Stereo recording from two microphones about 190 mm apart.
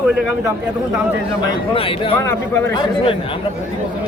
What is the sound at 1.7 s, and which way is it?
Speech, 30° left (ahead or behind).